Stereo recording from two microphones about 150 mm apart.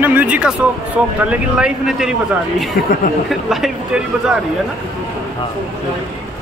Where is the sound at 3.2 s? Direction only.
Centre (ahead or behind).